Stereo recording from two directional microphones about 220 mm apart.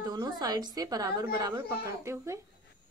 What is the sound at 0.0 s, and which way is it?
A woman's voice, 15° right (ahead or behind).